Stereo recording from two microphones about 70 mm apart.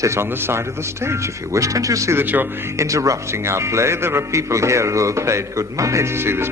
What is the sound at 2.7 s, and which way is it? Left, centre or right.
Speech, right.